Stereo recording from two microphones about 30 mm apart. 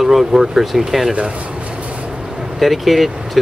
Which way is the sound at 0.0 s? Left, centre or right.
Centre.